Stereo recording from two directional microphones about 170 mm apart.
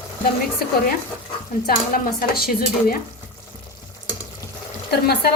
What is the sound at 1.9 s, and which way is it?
Speech, 55° left (ahead or behind).